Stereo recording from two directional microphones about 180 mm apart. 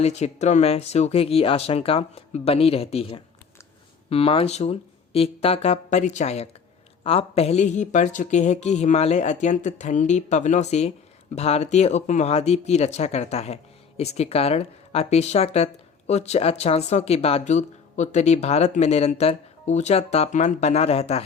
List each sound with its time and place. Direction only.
0.0 s speech: 40° left (ahead or behind)